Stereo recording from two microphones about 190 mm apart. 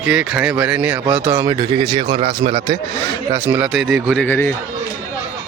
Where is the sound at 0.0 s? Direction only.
5° right (ahead or behind); by 2.7 s 25° right (ahead or behind).